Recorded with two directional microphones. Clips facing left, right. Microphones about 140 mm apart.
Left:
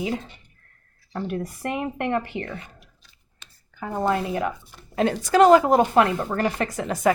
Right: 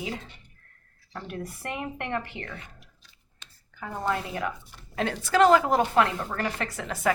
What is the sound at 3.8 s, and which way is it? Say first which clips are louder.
Speech: left 6 dB; 30° left (ahead or behind).